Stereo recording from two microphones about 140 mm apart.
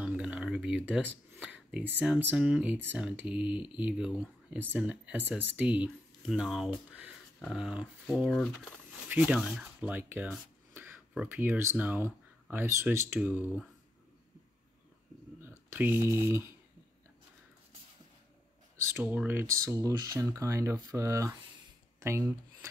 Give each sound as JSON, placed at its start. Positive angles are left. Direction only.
{"t": 0.0, "sound": "speech", "side_deg": -10}
{"t": 9.1, "sound": "speech", "side_deg": -10}
{"t": 15.7, "sound": "speech", "side_deg": -15}
{"t": 18.8, "sound": "speech", "side_deg": -20}